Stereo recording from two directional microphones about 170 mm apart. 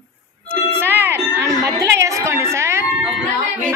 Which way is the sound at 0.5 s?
10° right (ahead or behind).